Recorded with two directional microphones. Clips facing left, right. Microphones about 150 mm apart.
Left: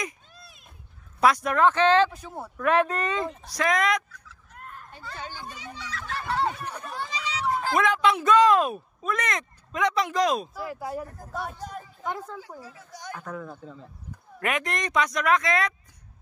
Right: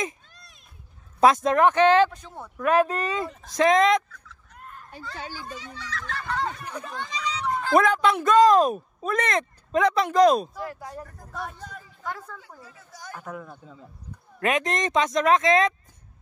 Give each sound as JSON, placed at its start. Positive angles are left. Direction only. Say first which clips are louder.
{"t": 0.3, "sound": "a sound", "louder": "left 4 dB", "side_deg": 5}
{"t": 1.2, "sound": "speech", "louder": "right 3 dB", "side_deg": -25}
{"t": 2.7, "sound": "speech", "louder": "right 2 dB", "side_deg": -35}
{"t": 3.5, "sound": "speech", "louder": "right 6 dB", "side_deg": -25}
{"t": 4.9, "sound": "speech", "louder": "right 2 dB", "side_deg": -10}
{"t": 5.5, "sound": "speech", "louder": "right 2 dB", "side_deg": 10}
{"t": 7.7, "sound": "speech", "louder": "right 4 dB", "side_deg": -40}
{"t": 10.5, "sound": "speech", "louder": "left 3 dB", "side_deg": 5}
{"t": 12.4, "sound": "speech", "louder": "left 6 dB", "side_deg": 0}
{"t": 14.4, "sound": "speech", "louder": "right 4 dB", "side_deg": -20}